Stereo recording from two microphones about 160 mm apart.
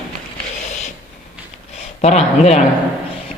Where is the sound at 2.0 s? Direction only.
45° left (ahead or behind).